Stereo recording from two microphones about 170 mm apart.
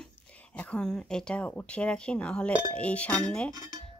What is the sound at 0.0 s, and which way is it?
Speech, 5° left (ahead or behind).